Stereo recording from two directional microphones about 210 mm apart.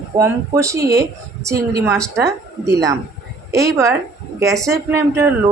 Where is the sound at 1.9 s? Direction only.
5° left (ahead or behind).